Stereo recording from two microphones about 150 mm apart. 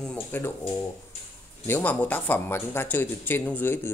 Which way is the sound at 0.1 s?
15° left (ahead or behind).